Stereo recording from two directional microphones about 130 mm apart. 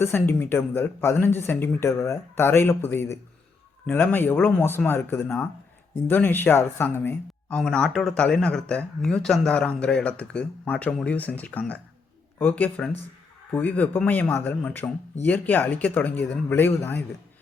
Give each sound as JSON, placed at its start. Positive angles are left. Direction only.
{"t": 0.0, "sound": "speech", "side_deg": 15}